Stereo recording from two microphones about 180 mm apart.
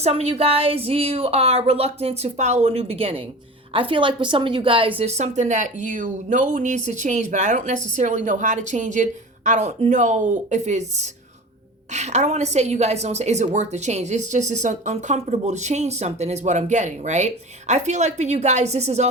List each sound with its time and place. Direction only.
0.0 s a woman's voice: 35° right (ahead or behind)